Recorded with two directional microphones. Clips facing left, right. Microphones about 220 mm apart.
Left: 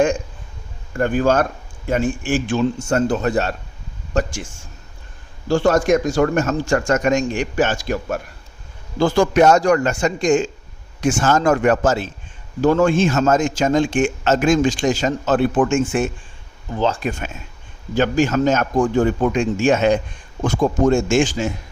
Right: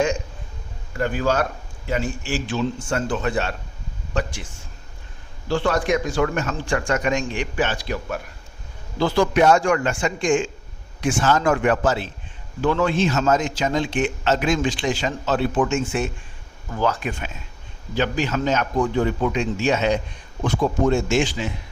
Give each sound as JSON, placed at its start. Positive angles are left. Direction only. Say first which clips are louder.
{"t": 0.9, "sound": "a man's voice", "louder": "left 5 dB", "side_deg": 50}
{"t": 16.7, "sound": "speech", "louder": "left 2 dB", "side_deg": 25}
{"t": 17.0, "sound": "a man's voice", "louder": "left 4 dB", "side_deg": 45}